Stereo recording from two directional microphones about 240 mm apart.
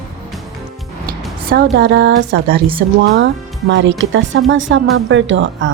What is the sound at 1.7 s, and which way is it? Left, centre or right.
A woman's voice, right.